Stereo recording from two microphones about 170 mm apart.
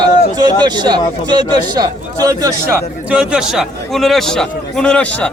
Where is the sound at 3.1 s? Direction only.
5° right (ahead or behind).